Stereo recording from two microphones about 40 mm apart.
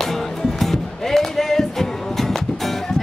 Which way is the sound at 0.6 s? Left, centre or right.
Centre.